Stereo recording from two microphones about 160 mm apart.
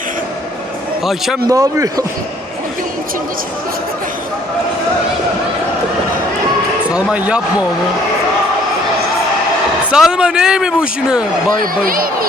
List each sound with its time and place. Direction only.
1.0 s speech: centre (ahead or behind)
1.5 s speech: 20° right (ahead or behind)
6.9 s speech: 5° right (ahead or behind)
9.9 s speech: 5° right (ahead or behind)
11.6 s speech: 60° right (ahead or behind)